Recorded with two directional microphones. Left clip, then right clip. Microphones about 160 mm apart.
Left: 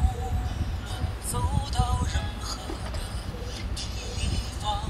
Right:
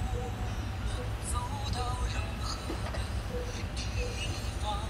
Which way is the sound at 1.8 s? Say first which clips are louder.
Left 7 dB; 45° left (ahead or behind).